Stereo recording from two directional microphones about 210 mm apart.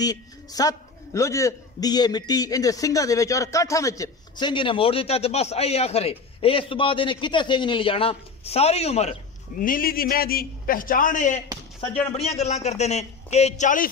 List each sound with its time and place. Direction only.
0.0 s a man's voice: 20° left (ahead or behind)
9.6 s a man's voice: 40° left (ahead or behind)